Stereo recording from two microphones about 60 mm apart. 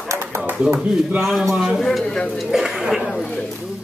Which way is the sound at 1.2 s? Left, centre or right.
Centre.